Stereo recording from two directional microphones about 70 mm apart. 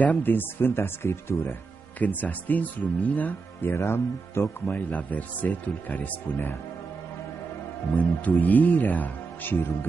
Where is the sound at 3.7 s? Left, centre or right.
Left.